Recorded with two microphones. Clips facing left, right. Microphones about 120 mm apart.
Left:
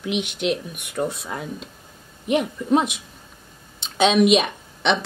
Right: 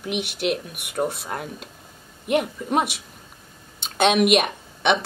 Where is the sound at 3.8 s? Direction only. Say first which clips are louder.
Left 1 dB; 60° right (ahead or behind).